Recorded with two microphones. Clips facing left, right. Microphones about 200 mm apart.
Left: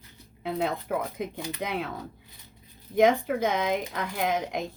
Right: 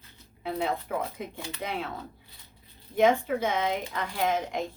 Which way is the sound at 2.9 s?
60° left (ahead or behind).